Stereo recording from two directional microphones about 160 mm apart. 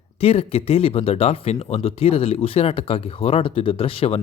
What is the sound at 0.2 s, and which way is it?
Speech, 40° left (ahead or behind).